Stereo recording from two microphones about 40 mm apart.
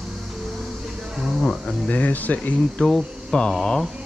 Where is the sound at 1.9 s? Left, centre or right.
Left.